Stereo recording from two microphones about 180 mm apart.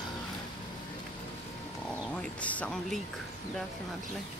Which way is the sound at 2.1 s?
5° left (ahead or behind).